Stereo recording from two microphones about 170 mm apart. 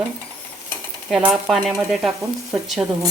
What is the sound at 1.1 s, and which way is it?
Stir, 5° right (ahead or behind).